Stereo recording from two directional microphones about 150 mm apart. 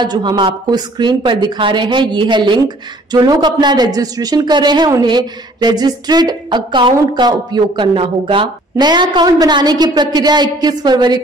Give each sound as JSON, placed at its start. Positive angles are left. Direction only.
{"t": 0.0, "sound": "speech", "side_deg": -30}